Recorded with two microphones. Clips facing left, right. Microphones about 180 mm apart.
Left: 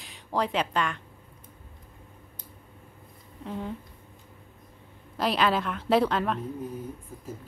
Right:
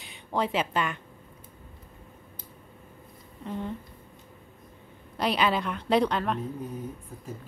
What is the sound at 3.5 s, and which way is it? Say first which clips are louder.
Speech: right 1 dB; 5° left (ahead or behind).